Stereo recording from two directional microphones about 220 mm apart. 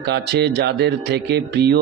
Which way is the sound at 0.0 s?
50° right (ahead or behind).